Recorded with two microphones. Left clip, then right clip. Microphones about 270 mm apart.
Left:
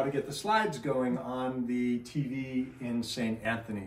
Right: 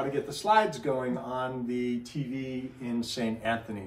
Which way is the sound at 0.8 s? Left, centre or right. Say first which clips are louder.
Right 1 dB; centre.